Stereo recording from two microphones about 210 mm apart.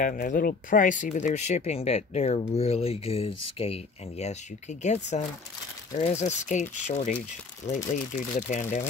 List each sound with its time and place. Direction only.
0.0 s speech: 40° left (ahead or behind)